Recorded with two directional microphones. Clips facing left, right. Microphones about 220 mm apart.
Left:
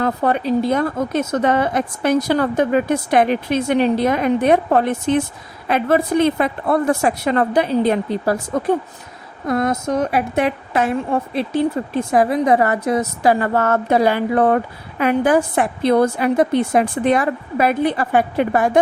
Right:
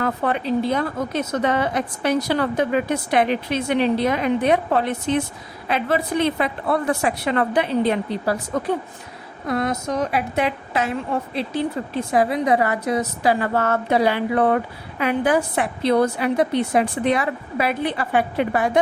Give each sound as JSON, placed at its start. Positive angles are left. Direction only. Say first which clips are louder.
{"t": 0.0, "sound": "a woman's voice", "louder": "left 4 dB", "side_deg": 40}